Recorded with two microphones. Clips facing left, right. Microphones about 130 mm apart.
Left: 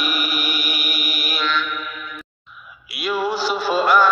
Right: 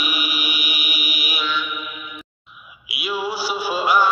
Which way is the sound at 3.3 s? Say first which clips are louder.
Left 3 dB; 10° right (ahead or behind).